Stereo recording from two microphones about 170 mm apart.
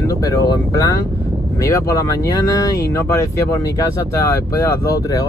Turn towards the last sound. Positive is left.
turn(degrees=20)  # may be behind; listen again after turning